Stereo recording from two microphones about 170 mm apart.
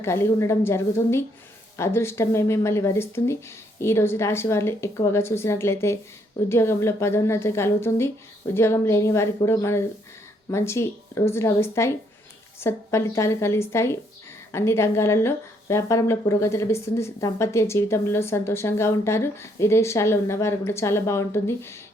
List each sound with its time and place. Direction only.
0.0 s a woman's voice: 15° left (ahead or behind)